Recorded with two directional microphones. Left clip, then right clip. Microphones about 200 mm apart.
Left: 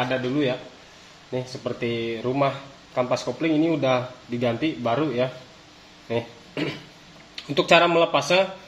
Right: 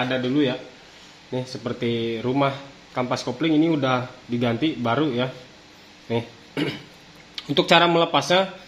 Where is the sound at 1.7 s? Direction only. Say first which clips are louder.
Right 3 dB; 30° right (ahead or behind).